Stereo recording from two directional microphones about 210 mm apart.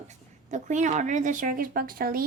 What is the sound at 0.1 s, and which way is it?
A woman's voice, 35° right (ahead or behind).